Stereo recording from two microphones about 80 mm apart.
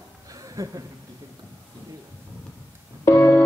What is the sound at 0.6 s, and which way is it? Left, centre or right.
Speech, right.